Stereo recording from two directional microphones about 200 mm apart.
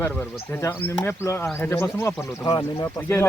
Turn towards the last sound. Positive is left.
turn(degrees=15)  # may be behind; listen again after turning